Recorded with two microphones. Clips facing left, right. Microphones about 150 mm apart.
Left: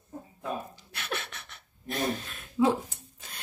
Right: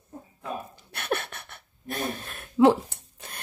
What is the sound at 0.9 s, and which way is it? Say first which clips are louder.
Speech: right 7 dB; 55° right (ahead or behind).